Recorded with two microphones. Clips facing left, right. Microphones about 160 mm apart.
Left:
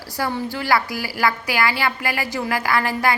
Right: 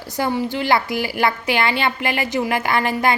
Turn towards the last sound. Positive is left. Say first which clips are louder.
# right 1 dB
turn(degrees=-20)  # may be behind; listen again after turning